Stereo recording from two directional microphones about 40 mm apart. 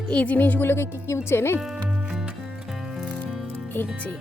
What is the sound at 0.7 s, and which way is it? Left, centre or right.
Speech, left.